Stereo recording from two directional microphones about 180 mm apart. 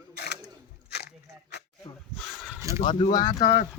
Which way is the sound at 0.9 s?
65° left (ahead or behind).